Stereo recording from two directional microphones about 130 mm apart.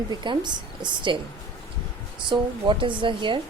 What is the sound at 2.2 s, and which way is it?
A woman's voice, 40° right (ahead or behind).